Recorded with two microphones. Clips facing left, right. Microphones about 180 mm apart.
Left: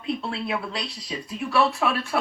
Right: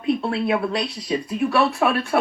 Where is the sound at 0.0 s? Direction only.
55° right (ahead or behind).